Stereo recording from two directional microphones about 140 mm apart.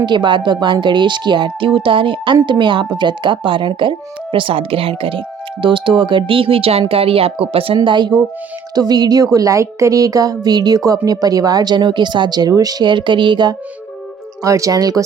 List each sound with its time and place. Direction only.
0.0 s a woman's voice: 35° right (ahead or behind)